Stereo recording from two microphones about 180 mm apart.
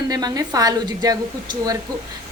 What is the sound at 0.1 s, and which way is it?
Speech, 20° right (ahead or behind).